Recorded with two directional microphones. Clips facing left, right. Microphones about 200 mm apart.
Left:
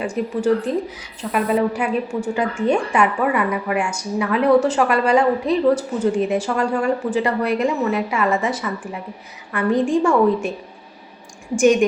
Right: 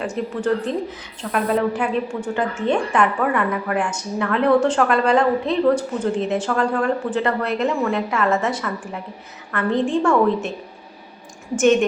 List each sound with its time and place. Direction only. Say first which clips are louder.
0.2 s a woman's voice: left 3 dB; 5° left (ahead or behind)
11.5 s a woman's voice: left 1 dB; 10° left (ahead or behind)